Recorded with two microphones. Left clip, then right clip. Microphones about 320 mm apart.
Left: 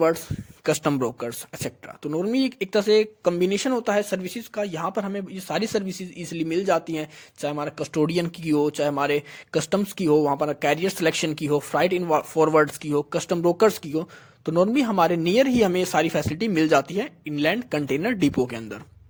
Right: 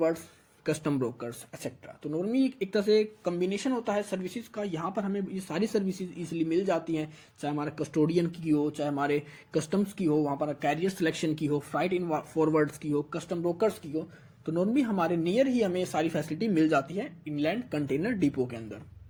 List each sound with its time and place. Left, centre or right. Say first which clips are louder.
0.6 s speech: left 7 dB; left